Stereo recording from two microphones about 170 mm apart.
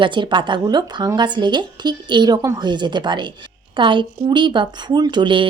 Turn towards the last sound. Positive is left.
turn(degrees=-30)  # may be behind; listen again after turning